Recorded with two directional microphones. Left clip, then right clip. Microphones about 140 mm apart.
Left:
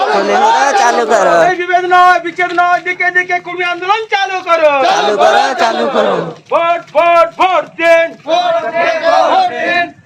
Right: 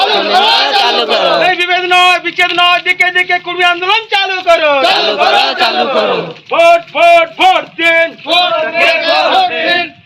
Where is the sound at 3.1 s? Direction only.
5° left (ahead or behind).